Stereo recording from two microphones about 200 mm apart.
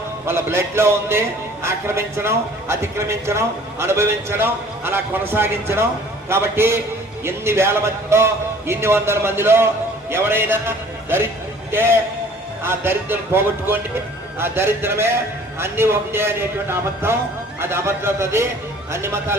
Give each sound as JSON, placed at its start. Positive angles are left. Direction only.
{"t": 0.3, "sound": "a man's voice", "side_deg": -10}